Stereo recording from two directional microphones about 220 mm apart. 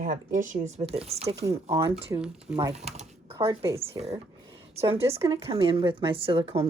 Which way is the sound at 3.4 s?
10° right (ahead or behind).